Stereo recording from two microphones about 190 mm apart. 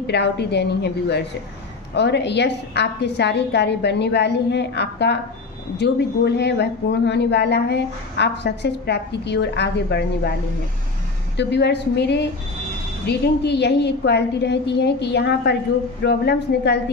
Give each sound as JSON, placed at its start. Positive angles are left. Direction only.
{"t": 0.0, "sound": "speech", "side_deg": 60}
{"t": 11.3, "sound": "speech", "side_deg": 65}